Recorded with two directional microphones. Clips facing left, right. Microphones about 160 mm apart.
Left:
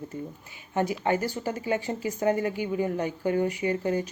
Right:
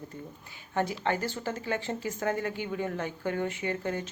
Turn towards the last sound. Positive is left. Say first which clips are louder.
# left 6 dB
turn(degrees=15)  # may be behind; listen again after turning